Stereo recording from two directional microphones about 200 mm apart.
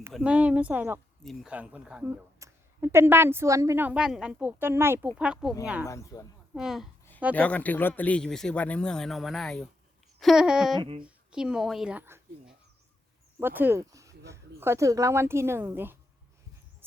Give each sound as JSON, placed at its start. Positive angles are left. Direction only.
{"t": 0.1, "sound": "a woman's voice", "side_deg": -5}
{"t": 1.2, "sound": "a woman's voice", "side_deg": 0}
{"t": 5.9, "sound": "speech", "side_deg": 15}
{"t": 6.5, "sound": "a woman's voice", "side_deg": 0}
{"t": 10.8, "sound": "speech", "side_deg": -25}
{"t": 11.0, "sound": "a woman's voice", "side_deg": -5}